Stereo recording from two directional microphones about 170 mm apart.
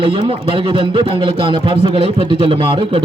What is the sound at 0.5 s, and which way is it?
A man's voice, 30° right (ahead or behind).